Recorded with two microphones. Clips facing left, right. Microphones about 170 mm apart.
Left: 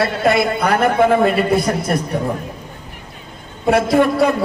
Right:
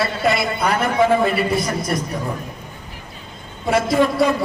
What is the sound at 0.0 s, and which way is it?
A man's voice, 55° left (ahead or behind).